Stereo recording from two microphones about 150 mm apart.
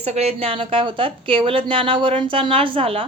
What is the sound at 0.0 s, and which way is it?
A woman's voice, 45° right (ahead or behind).